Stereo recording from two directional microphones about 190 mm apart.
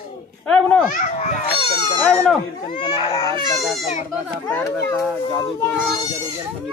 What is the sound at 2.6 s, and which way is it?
Speech, 25° left (ahead or behind).